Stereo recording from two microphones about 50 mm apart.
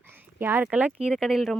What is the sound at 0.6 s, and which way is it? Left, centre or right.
Speech, right.